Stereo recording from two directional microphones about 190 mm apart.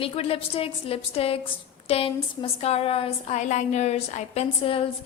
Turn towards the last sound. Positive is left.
turn(degrees=30)  # may be behind; listen again after turning